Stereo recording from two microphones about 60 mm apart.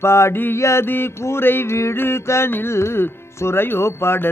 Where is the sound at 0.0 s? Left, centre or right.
Left.